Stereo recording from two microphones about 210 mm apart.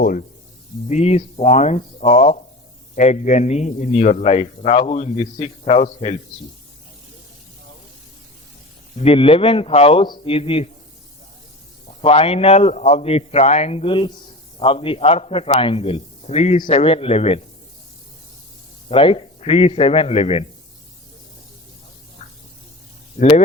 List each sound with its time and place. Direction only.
0.0 s a man's voice: 40° left (ahead or behind)
9.0 s a man's voice: 25° left (ahead or behind)
11.9 s a man's voice: 30° left (ahead or behind)
18.9 s a man's voice: 25° left (ahead or behind)
23.1 s speech: 40° left (ahead or behind)